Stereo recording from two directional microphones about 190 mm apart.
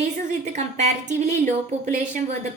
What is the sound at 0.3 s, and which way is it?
Speech, 40° right (ahead or behind).